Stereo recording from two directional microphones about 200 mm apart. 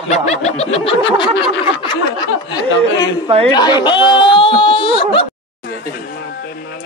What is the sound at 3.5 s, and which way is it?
Whimper, 20° left (ahead or behind).